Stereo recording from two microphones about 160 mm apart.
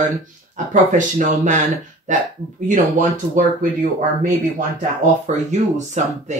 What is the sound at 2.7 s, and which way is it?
Speech, 50° right (ahead or behind).